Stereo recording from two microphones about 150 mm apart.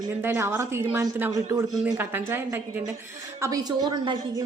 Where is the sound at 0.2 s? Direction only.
15° right (ahead or behind).